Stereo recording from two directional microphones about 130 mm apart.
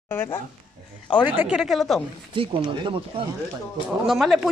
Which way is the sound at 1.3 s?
10° right (ahead or behind).